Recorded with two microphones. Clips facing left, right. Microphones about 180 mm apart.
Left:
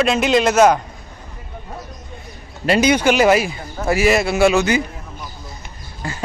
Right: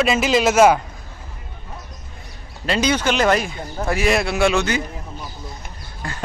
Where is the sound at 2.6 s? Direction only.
10° left (ahead or behind).